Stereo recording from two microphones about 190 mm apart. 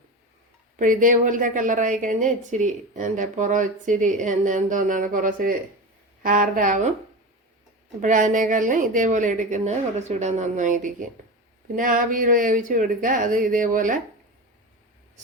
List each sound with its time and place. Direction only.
0.8 s a woman's voice: 45° right (ahead or behind)
8.0 s a woman's voice: 40° right (ahead or behind)